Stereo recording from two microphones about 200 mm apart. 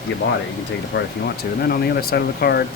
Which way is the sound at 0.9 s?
65° left (ahead or behind).